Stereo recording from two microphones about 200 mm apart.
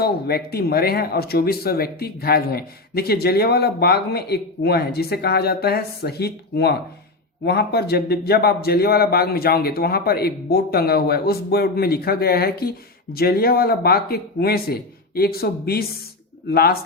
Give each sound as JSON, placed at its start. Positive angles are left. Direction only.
{"t": 0.0, "sound": "speech", "side_deg": 50}